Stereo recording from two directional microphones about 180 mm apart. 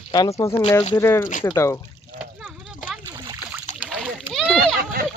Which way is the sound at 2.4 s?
5° right (ahead or behind).